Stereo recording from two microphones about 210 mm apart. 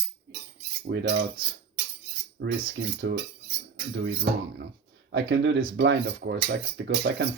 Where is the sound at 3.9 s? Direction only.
55° right (ahead or behind).